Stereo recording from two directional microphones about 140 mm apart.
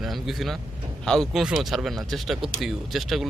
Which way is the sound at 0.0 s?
Centre (ahead or behind).